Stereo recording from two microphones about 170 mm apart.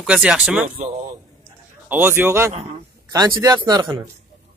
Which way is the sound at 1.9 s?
10° right (ahead or behind).